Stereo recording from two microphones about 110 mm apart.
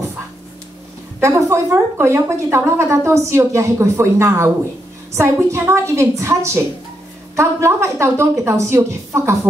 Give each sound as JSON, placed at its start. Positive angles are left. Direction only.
{"t": 1.2, "sound": "a woman's voice", "side_deg": -25}
{"t": 5.5, "sound": "a woman's voice", "side_deg": -25}